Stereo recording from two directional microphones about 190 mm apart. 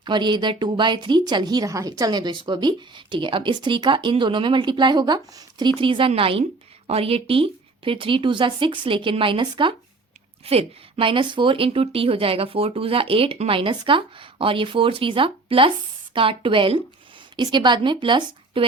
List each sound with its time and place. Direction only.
0.0 s a woman's voice: 25° right (ahead or behind)